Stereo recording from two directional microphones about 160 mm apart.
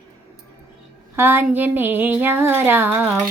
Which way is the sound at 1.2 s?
15° right (ahead or behind).